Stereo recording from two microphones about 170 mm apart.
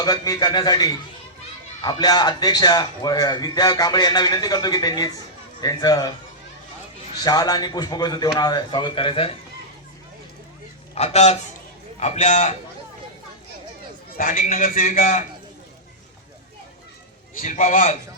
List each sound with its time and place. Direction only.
0.0 s a man's voice: 25° left (ahead or behind)
7.3 s a man's voice: 25° left (ahead or behind)
10.9 s a man's voice: 40° left (ahead or behind)
14.2 s a man's voice: 50° left (ahead or behind)
17.3 s a man's voice: 50° left (ahead or behind)